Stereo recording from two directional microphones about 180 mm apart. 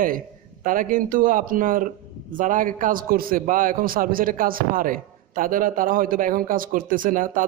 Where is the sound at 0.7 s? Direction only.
50° right (ahead or behind).